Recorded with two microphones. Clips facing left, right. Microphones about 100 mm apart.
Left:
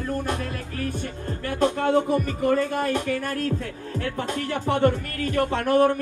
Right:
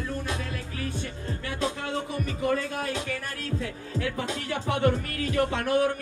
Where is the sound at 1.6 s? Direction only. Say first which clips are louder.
Left 11 dB; 50° left (ahead or behind).